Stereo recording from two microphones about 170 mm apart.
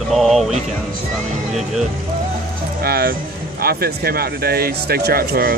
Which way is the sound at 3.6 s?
65° right (ahead or behind).